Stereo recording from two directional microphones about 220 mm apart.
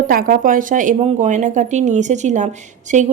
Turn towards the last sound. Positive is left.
turn(degrees=-35)  # may be behind; listen again after turning